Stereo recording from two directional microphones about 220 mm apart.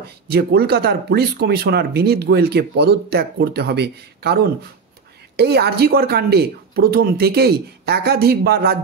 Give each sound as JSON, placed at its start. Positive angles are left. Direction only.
{"t": 0.0, "sound": "speech", "side_deg": -45}